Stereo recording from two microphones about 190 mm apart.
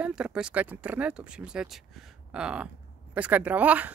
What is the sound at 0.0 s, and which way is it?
Speech, 5° right (ahead or behind).